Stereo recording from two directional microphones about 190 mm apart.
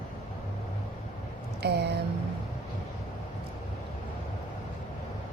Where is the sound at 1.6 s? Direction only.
60° right (ahead or behind).